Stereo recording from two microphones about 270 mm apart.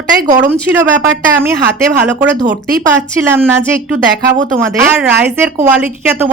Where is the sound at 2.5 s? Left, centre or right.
Centre.